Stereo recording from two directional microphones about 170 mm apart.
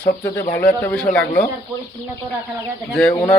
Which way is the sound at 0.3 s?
10° left (ahead or behind).